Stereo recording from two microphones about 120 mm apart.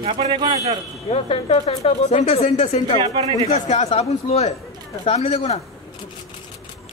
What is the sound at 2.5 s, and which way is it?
Speech, 70° left (ahead or behind).